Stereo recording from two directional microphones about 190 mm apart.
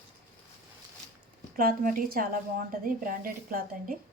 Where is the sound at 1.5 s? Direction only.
45° right (ahead or behind).